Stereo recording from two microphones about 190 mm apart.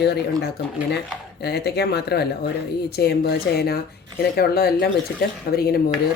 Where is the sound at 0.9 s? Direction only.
60° left (ahead or behind).